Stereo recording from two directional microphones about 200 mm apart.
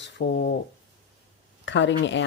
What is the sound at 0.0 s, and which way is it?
Speech, 55° left (ahead or behind).